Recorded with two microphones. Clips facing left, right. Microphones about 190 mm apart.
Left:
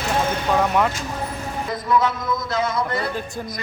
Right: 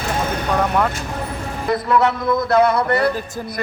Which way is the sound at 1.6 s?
65° right (ahead or behind).